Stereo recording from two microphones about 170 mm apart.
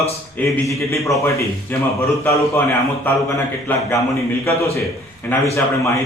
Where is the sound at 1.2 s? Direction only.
15° left (ahead or behind).